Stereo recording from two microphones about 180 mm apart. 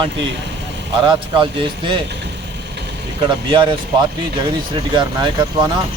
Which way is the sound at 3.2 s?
25° right (ahead or behind).